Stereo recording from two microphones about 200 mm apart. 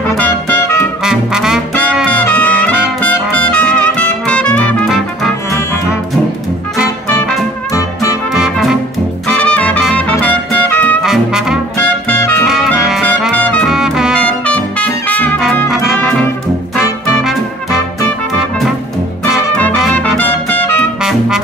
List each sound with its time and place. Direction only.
1.0 s brass instrument: 5° right (ahead or behind)
3.4 s music: 5° left (ahead or behind)
7.7 s music: 15° left (ahead or behind)
8.3 s music: centre (ahead or behind)
10.7 s brass instrument: 5° left (ahead or behind)
12.1 s music: 10° left (ahead or behind)
12.4 s music: centre (ahead or behind)
17.2 s music: centre (ahead or behind)
19.2 s music: centre (ahead or behind)